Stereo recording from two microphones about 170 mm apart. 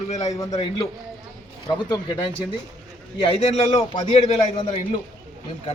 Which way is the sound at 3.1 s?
35° left (ahead or behind).